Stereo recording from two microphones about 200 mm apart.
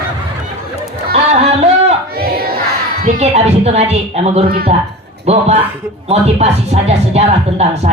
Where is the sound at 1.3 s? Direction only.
30° right (ahead or behind).